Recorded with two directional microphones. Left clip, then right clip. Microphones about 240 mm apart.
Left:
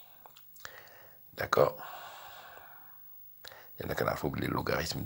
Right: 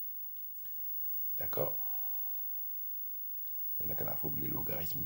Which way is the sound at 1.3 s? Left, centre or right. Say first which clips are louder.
Left 12 dB; centre.